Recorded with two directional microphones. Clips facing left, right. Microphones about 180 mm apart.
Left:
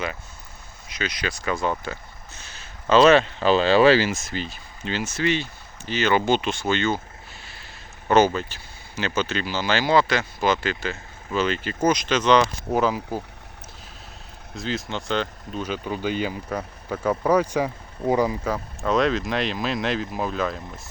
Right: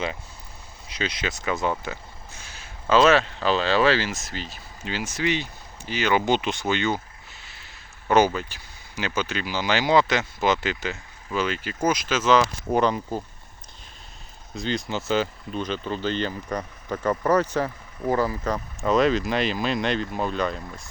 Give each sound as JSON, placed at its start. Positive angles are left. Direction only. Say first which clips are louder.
{"t": 0.9, "sound": "speech", "louder": "even", "side_deg": -30}
{"t": 1.8, "sound": "a sound", "louder": "left 1 dB", "side_deg": -15}
{"t": 2.9, "sound": "speech", "louder": "left 3 dB", "side_deg": -5}
{"t": 7.4, "sound": "a sound", "louder": "left 4 dB", "side_deg": -20}
{"t": 8.1, "sound": "speech", "louder": "left 1 dB", "side_deg": -10}
{"t": 14.5, "sound": "speech", "louder": "right 1 dB", "side_deg": 0}
{"t": 15.6, "sound": "speech", "louder": "left 1 dB", "side_deg": 10}